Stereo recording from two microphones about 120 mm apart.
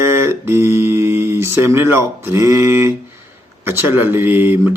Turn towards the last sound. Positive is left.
turn(degrees=-15)  # may be behind; listen again after turning